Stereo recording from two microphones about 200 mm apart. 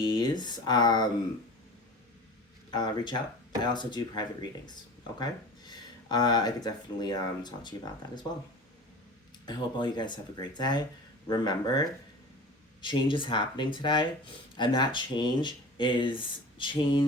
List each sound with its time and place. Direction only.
0.0 s speech: 20° left (ahead or behind)
2.6 s speech: 20° left (ahead or behind)
9.5 s speech: 20° left (ahead or behind)